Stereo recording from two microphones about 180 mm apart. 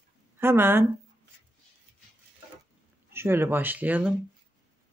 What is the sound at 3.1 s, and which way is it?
Speech, 10° right (ahead or behind).